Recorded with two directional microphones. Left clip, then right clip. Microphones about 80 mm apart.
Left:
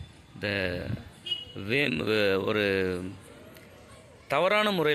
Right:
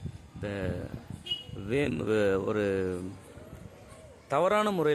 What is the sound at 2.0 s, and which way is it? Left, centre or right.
Speech, centre.